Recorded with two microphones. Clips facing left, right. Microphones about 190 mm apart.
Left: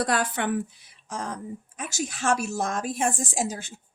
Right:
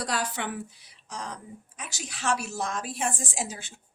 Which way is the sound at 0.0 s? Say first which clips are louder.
Left 5 dB; 55° left (ahead or behind).